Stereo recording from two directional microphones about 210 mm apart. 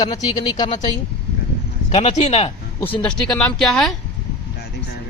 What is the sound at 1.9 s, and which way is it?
Speech, 30° left (ahead or behind).